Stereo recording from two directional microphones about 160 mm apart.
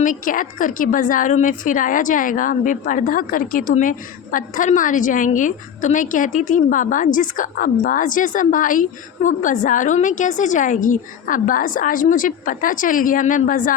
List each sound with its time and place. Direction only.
0.0 s a woman's voice: 55° left (ahead or behind)